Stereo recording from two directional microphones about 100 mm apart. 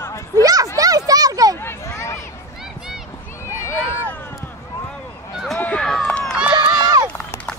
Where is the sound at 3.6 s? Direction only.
25° left (ahead or behind).